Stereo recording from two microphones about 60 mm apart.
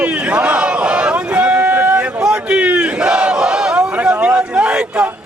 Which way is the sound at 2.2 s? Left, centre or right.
Centre.